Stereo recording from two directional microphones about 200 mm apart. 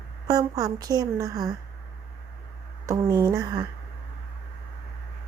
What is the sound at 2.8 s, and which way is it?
Speech, 15° right (ahead or behind).